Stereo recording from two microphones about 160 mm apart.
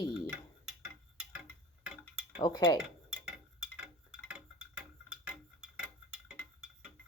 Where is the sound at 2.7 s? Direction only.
5° right (ahead or behind).